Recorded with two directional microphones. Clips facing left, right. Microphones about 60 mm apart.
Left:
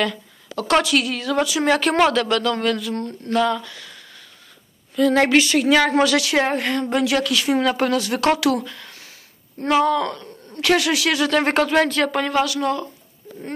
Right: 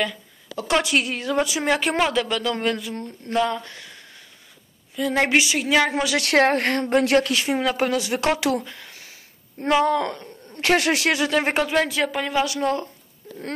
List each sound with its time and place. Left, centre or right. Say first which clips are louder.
0.0 s a sound: left 3 dB; centre
0.8 s speech: left 2 dB; right
1.6 s speech: left 7 dB; centre
6.2 s speech: right 2 dB; right
7.5 s speech: left 3 dB; centre; by 11.1 s right
11.1 s speech: left 3 dB; centre
12.4 s speech: left 1 dB; right